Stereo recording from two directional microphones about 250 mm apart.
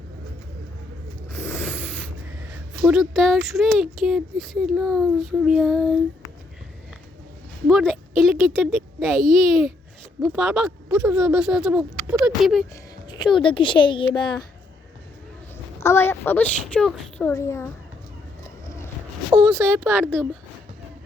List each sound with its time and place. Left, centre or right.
1.3 s a sound: centre
2.8 s speech: centre
7.7 s speech: centre
13.1 s speech: centre
15.8 s a woman's voice: centre
19.3 s speech: centre